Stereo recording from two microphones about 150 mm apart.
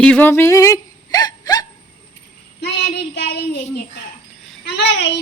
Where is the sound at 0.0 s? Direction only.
10° left (ahead or behind); by 1.6 s 25° left (ahead or behind).